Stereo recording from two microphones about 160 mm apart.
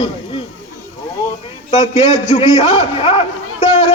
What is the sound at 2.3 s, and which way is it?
Speech, 40° left (ahead or behind).